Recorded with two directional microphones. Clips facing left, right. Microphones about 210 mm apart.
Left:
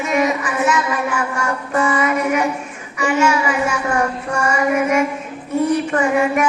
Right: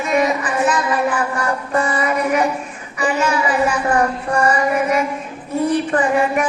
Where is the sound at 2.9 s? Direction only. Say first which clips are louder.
Left 2 dB; 35° right (ahead or behind).